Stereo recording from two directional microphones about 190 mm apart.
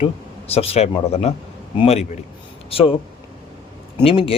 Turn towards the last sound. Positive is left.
turn(degrees=30)  # may be behind; listen again after turning